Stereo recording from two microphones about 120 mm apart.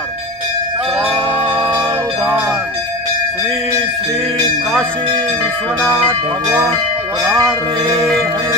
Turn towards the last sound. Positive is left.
turn(degrees=-25)  # may be behind; listen again after turning